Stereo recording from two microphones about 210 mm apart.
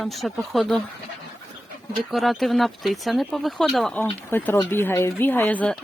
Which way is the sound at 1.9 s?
Centre (ahead or behind).